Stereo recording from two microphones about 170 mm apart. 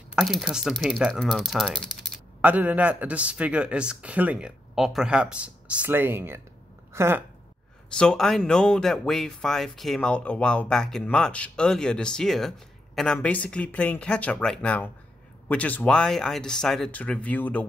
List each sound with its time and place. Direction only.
0.1 s speech: centre (ahead or behind)
6.9 s a sound: 15° right (ahead or behind)
7.9 s speech: 5° left (ahead or behind)